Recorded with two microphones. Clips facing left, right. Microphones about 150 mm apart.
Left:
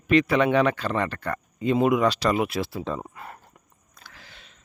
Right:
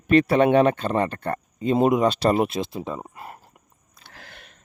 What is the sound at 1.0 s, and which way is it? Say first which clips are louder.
Speech: right 3 dB; 25° right (ahead or behind).